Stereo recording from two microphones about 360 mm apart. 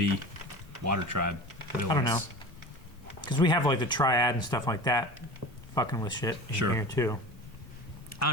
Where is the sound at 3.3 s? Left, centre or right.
Centre.